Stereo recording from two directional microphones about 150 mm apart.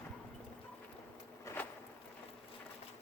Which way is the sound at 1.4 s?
15° left (ahead or behind).